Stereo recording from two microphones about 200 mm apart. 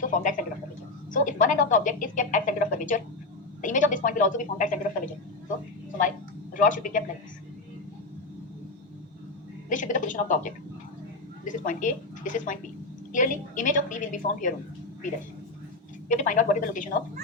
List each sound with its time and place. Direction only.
0.1 s a woman's voice: 40° left (ahead or behind)
6.6 s speech: 40° left (ahead or behind)
9.6 s a woman's voice: 40° left (ahead or behind)
16.0 s speech: 40° left (ahead or behind)